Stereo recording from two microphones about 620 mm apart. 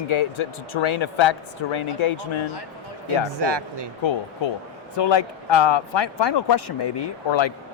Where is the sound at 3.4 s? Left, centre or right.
Right.